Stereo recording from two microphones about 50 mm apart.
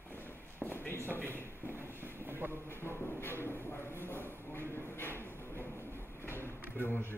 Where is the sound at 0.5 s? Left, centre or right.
Left.